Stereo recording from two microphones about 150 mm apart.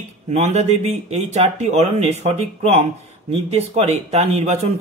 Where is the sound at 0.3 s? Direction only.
45° right (ahead or behind).